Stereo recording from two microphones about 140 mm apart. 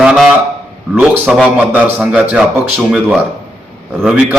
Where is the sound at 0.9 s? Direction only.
10° right (ahead or behind).